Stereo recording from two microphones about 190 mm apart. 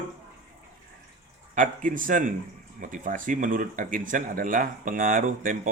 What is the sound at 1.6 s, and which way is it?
Speech, 45° right (ahead or behind).